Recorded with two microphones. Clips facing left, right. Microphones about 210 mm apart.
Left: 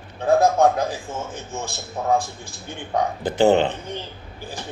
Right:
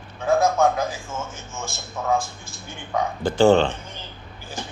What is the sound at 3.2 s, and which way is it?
Speech, 20° left (ahead or behind).